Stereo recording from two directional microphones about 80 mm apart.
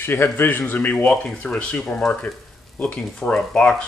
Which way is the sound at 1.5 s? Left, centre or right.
Centre.